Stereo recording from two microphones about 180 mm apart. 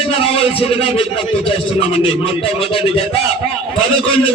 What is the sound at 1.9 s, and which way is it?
Speech, 30° left (ahead or behind).